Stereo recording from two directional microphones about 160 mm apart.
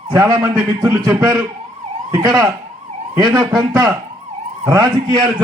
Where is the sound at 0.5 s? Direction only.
10° right (ahead or behind).